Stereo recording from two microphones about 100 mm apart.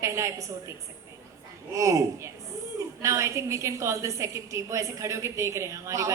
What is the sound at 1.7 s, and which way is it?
A woman's voice, 30° right (ahead or behind).